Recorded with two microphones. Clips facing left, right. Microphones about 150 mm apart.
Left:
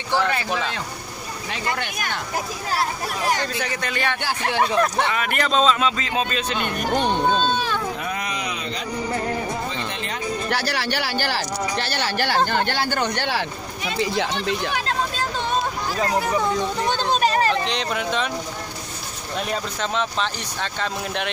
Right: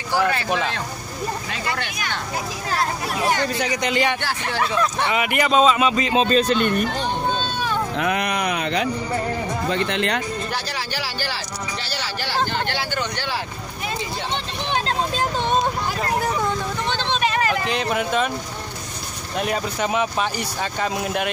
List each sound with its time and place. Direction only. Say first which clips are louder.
0.1 s speech: right 1 dB; 10° right (ahead or behind)
3.5 s speech: right 5 dB; 15° right (ahead or behind)
4.2 s speech: left 2 dB; 15° left (ahead or behind)
5.1 s speech: right 3 dB; 15° right (ahead or behind)
6.2 s a man's voice: right 7 dB; 45° right (ahead or behind)
8.0 s a sound: right 6 dB; 70° right (ahead or behind)
9.7 s speech: right 7 dB; 70° right (ahead or behind)
10.5 s speech: left 4 dB; 70° left (ahead or behind)
16.9 s vehicle: left 2 dB; 40° left (ahead or behind)
17.6 s speech: right 2 dB; 5° right (ahead or behind)
19.4 s speech: right 4 dB; 10° right (ahead or behind)